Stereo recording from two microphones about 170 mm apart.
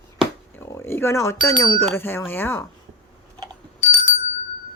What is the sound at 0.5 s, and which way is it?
Speech, 15° left (ahead or behind).